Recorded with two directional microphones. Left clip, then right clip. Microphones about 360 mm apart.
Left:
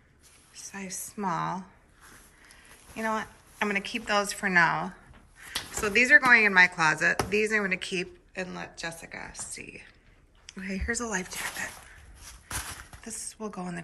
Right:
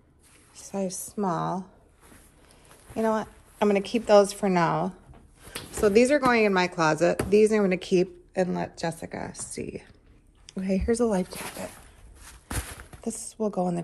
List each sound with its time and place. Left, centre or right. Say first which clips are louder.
0.6 s a sound: right 8 dB; centre
1.1 s a woman's voice: right 1 dB; centre
3.0 s speech: right 4 dB; centre
5.9 s speech: left 3 dB; centre
13.3 s speech: right 11 dB; centre